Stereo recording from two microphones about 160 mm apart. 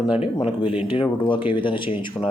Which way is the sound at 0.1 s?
35° left (ahead or behind).